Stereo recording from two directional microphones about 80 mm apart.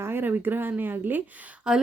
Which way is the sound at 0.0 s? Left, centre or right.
Right.